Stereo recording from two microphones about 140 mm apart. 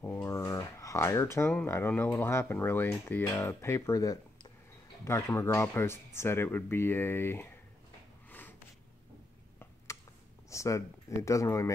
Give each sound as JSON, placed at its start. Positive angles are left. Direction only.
{"t": 0.0, "sound": "speech", "side_deg": 15}
{"t": 8.3, "sound": "snort", "side_deg": 15}
{"t": 10.5, "sound": "speech", "side_deg": 20}